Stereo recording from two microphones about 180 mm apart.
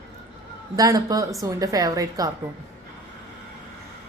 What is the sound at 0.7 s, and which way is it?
A woman's voice, 20° right (ahead or behind).